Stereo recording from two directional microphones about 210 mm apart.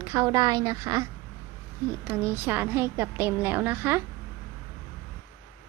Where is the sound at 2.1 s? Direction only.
10° right (ahead or behind).